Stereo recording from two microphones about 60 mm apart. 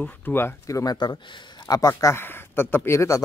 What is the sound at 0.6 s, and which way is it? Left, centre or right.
Speech, left.